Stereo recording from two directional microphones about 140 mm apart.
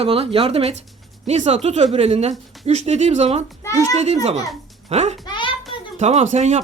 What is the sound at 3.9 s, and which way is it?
A child's voice, 50° right (ahead or behind).